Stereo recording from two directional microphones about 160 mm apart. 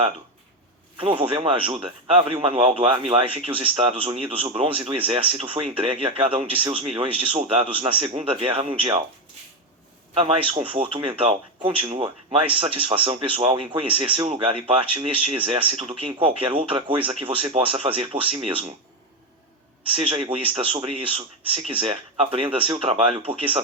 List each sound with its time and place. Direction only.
0.9 s speech: 35° right (ahead or behind)
10.2 s speech: 35° right (ahead or behind)
20.2 s speech: 35° right (ahead or behind)